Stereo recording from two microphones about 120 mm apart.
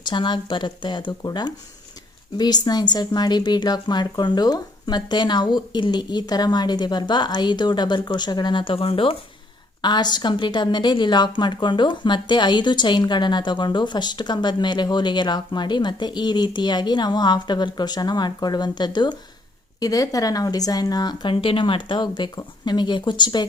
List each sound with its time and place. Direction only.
0.0 s speech: 40° left (ahead or behind)
9.8 s speech: 35° left (ahead or behind)